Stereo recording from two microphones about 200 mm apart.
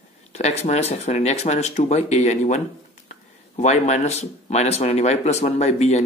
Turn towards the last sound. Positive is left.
turn(degrees=35)  # may be behind; listen again after turning